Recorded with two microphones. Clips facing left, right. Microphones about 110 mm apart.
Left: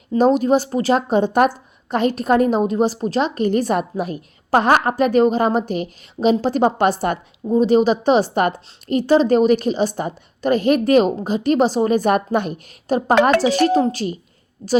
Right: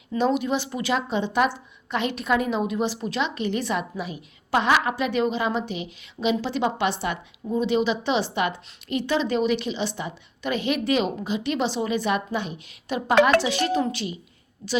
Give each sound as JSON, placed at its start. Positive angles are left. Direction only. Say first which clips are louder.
{"t": 0.1, "sound": "speech", "louder": "left 8 dB", "side_deg": 40}